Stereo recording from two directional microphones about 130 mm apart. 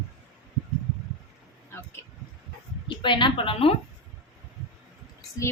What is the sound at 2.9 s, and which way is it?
Speech, 40° left (ahead or behind).